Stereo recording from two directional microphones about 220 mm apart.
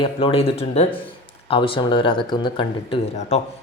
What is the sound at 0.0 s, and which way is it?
Speech, 25° left (ahead or behind).